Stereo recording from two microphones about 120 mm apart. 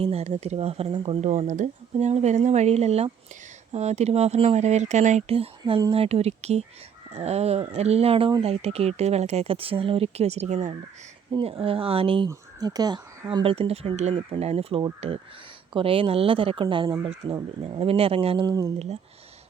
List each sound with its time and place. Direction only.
0.0 s speech: 60° right (ahead or behind)
1.2 s speech: 80° right
11.3 s speech: 50° right (ahead or behind)
12.3 s speech: 35° right (ahead or behind)
13.3 s speech: 50° right (ahead or behind)
18.4 s speech: 30° right (ahead or behind)